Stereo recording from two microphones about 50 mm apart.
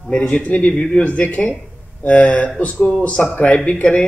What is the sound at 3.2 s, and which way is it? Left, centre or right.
Speech, centre.